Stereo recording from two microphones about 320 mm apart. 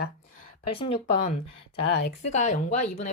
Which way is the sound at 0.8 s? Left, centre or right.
Left.